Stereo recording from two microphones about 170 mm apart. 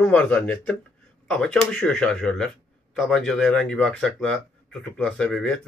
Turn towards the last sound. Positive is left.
turn(degrees=5)  # may be behind; listen again after turning